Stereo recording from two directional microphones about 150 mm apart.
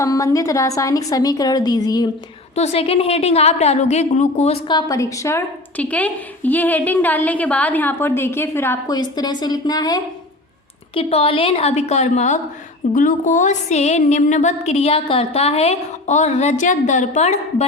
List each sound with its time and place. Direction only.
0.0 s a woman's voice: 20° left (ahead or behind)
2.6 s speech: 40° left (ahead or behind)
4.7 s a woman's voice: 25° left (ahead or behind)
9.0 s a woman's voice: 30° left (ahead or behind)
10.9 s speech: 40° left (ahead or behind)
12.9 s speech: 60° left (ahead or behind)